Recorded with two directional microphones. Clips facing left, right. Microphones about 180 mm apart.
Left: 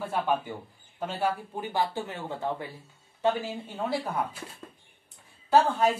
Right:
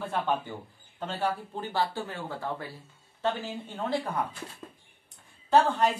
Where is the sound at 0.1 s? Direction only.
10° left (ahead or behind).